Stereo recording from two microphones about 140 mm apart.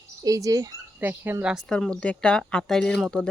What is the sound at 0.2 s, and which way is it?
Speech, 25° right (ahead or behind).